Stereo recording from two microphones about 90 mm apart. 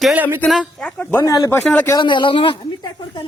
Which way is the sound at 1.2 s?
40° left (ahead or behind).